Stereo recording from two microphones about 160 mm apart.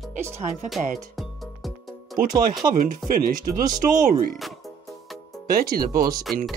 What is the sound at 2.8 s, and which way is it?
Speech, 60° right (ahead or behind).